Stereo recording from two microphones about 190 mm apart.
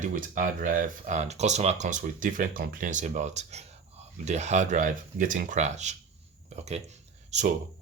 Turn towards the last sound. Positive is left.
turn(degrees=-35)  # may be behind; listen again after turning